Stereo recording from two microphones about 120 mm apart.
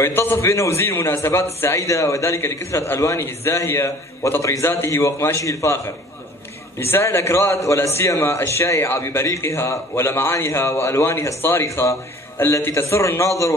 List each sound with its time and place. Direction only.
0.0 s a man's voice: 20° left (ahead or behind)
6.8 s a man's voice: 20° left (ahead or behind)